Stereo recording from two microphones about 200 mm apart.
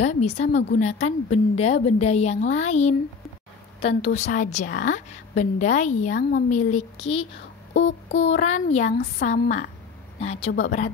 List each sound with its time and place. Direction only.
0.0 s a woman's voice: 35° left (ahead or behind)
4.0 s a woman's voice: 35° left (ahead or behind)
7.7 s a sound: 60° left (ahead or behind)
8.3 s a woman's voice: 35° left (ahead or behind)